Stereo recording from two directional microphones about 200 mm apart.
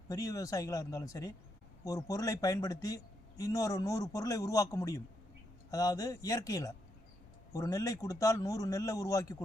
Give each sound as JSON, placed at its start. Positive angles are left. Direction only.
{"t": 0.1, "sound": "a man's voice", "side_deg": 15}